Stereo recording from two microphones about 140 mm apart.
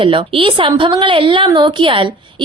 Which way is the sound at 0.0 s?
40° right (ahead or behind).